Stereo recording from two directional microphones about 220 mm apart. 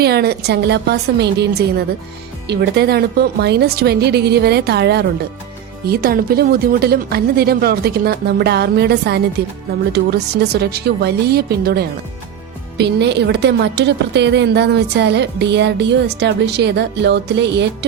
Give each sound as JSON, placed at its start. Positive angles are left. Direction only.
{"t": 0.0, "sound": "a woman's voice", "side_deg": -45}